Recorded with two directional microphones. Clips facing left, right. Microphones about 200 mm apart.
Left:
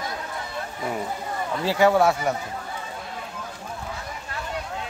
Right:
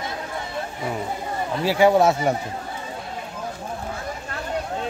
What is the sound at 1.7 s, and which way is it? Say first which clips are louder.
Speech: right 2 dB; 15° right (ahead or behind).